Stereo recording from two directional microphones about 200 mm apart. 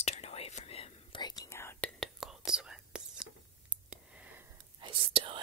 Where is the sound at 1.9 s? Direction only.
Centre (ahead or behind).